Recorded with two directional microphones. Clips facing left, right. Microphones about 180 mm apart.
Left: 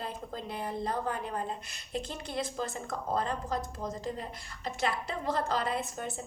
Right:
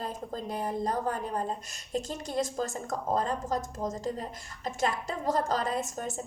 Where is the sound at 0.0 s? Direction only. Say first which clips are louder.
Right 3 dB; 45° right (ahead or behind).